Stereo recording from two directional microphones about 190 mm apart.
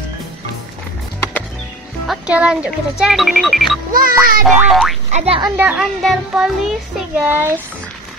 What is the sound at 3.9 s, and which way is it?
Speech, 50° right (ahead or behind).